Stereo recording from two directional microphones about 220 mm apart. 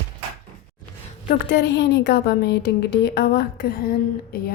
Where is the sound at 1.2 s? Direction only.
45° left (ahead or behind).